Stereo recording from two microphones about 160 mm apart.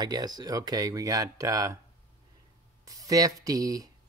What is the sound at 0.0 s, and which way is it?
Speech, 25° right (ahead or behind).